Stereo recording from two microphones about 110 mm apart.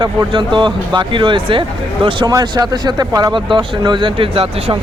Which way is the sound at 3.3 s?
45° right (ahead or behind).